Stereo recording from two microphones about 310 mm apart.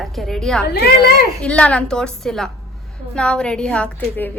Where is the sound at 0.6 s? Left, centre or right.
Left.